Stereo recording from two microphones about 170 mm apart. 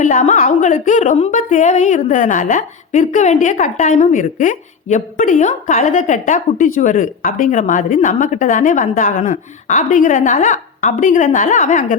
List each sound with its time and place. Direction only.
0.0 s a woman's voice: 45° left (ahead or behind)